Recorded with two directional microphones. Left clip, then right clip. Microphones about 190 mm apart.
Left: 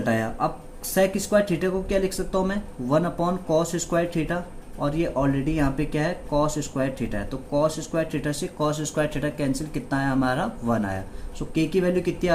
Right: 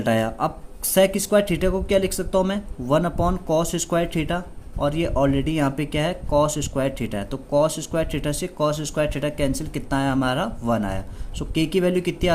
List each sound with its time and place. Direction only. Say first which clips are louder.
0.0 s speech: right 3 dB; 40° right (ahead or behind)